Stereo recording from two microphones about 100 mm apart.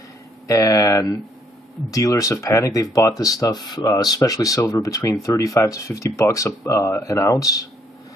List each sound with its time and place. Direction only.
0.5 s speech: 35° left (ahead or behind)